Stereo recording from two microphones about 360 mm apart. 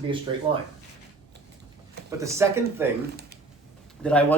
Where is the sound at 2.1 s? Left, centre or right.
Centre.